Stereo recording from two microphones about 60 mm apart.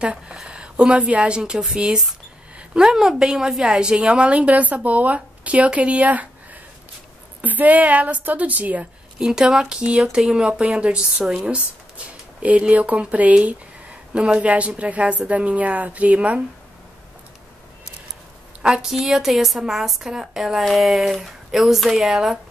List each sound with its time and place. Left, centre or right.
0.0 s a woman's voice: centre
7.4 s a woman's voice: right
9.2 s a woman's voice: centre
18.6 s a woman's voice: centre